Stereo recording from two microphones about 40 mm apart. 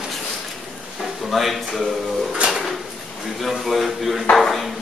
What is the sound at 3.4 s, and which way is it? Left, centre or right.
Speech, centre.